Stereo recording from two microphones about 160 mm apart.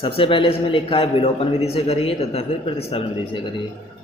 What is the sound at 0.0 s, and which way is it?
A man's voice, 35° left (ahead or behind).